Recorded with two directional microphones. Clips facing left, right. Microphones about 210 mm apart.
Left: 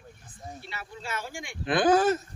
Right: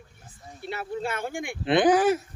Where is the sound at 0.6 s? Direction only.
55° right (ahead or behind).